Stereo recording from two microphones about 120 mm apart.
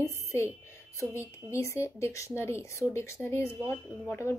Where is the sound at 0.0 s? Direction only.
25° left (ahead or behind).